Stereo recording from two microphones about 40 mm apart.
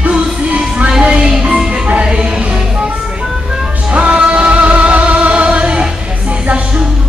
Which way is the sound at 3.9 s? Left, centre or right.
Right.